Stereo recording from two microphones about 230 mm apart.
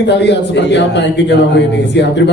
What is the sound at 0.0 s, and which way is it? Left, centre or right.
A man's voice, left.